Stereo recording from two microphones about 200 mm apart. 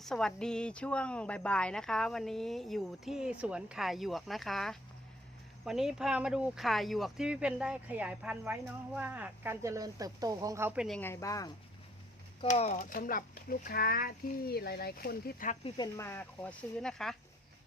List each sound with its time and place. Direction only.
0.0 s speech: centre (ahead or behind)
10.8 s speech: 5° left (ahead or behind)
12.5 s speech: 35° left (ahead or behind)
16.0 s speech: 10° left (ahead or behind)